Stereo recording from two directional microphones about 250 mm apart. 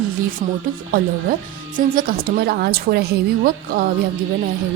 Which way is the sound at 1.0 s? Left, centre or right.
Right.